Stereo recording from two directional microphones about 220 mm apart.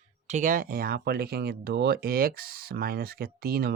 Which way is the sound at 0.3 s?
35° right (ahead or behind).